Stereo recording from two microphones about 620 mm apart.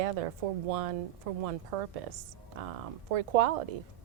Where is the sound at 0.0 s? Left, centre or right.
Right.